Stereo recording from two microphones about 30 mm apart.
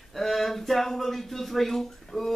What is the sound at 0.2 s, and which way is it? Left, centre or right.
Speech, centre.